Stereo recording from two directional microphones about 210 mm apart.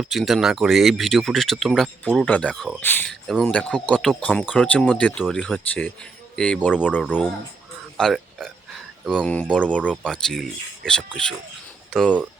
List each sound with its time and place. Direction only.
0.0 s speech: centre (ahead or behind)